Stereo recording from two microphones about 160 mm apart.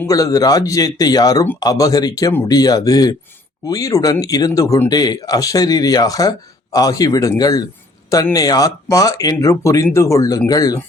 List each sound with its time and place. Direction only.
0.0 s speech: 20° left (ahead or behind)